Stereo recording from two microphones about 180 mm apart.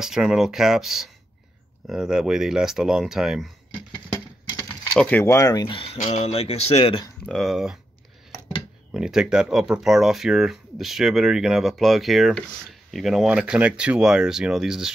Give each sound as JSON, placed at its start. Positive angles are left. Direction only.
{"t": 0.0, "sound": "speech", "side_deg": -5}
{"t": 4.9, "sound": "speech", "side_deg": 10}
{"t": 7.2, "sound": "speech", "side_deg": 0}